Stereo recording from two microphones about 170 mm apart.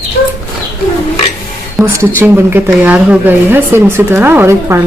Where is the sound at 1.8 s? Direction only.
15° right (ahead or behind).